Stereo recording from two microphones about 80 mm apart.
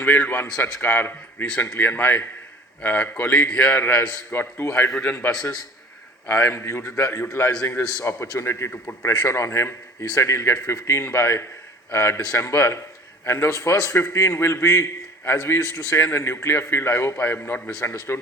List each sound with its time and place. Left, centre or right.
0.0 s a man's voice: left
6.5 s a man's voice: left
8.7 s a man's voice: left
9.0 s a man's voice: left